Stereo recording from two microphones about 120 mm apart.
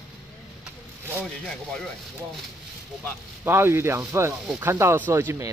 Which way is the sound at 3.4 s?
20° right (ahead or behind).